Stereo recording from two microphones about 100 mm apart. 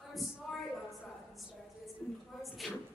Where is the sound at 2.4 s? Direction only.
Centre (ahead or behind).